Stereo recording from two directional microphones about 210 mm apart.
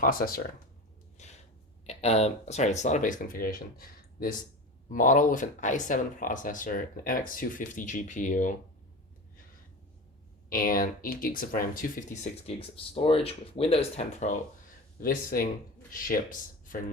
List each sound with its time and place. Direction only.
0.0 s speech: 45° left (ahead or behind)
1.2 s a sound: 35° left (ahead or behind)
1.9 s speech: 30° left (ahead or behind)
10.5 s speech: 45° left (ahead or behind)
15.0 s speech: 45° left (ahead or behind)